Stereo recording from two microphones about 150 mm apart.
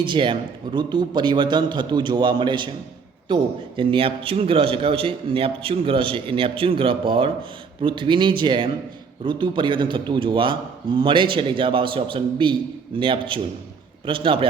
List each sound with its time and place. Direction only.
0.0 s a man's voice: 35° right (ahead or behind)